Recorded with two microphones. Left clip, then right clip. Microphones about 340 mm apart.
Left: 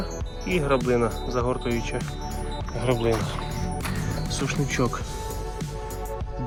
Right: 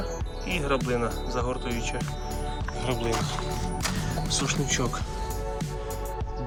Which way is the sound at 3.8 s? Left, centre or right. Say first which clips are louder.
Right 1 dB; centre.